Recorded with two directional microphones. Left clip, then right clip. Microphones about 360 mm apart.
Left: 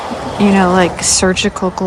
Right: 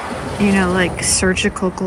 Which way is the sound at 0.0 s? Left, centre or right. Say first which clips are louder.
Left 4 dB; left.